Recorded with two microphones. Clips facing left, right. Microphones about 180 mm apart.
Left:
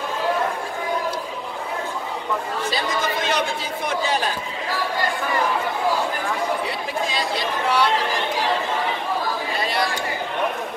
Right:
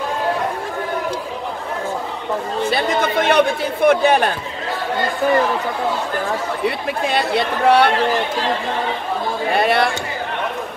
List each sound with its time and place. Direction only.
2.7 s speech: 60° right (ahead or behind)
6.6 s speech: 60° right (ahead or behind)
9.5 s speech: 65° right (ahead or behind)